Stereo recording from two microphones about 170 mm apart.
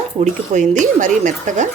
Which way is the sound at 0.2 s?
45° right (ahead or behind).